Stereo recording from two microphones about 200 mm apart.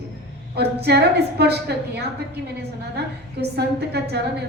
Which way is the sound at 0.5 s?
55° right (ahead or behind).